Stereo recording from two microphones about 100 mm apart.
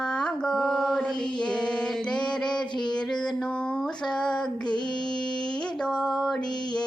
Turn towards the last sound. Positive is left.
turn(degrees=45)  # may be behind; listen again after turning